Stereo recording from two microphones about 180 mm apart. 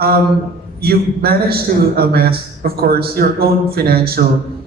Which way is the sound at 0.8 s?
60° right (ahead or behind).